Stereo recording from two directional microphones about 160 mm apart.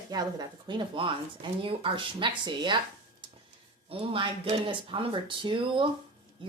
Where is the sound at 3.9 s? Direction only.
35° right (ahead or behind).